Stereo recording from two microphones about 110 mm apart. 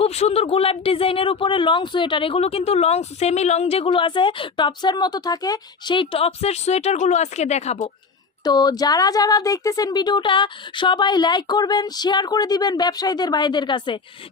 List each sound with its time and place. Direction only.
0.0 s speech: 75° left (ahead or behind)
3.8 s speech: 50° left (ahead or behind); by 7.9 s 90° left
8.4 s speech: 35° left (ahead or behind)